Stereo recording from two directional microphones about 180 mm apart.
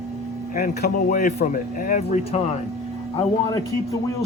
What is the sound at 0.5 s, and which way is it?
Speech, 45° left (ahead or behind).